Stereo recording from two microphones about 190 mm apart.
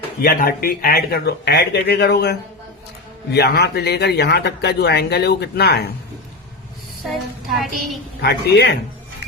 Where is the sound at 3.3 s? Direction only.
60° left (ahead or behind).